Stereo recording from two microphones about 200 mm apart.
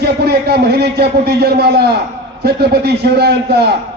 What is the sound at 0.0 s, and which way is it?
A man's voice, 55° right (ahead or behind).